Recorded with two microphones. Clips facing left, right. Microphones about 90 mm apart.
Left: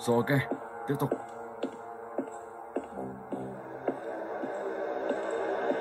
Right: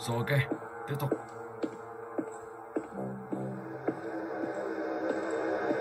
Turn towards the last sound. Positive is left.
turn(degrees=-10)  # may be behind; listen again after turning